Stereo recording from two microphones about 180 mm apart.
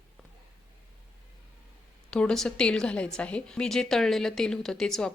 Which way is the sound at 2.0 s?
5° left (ahead or behind).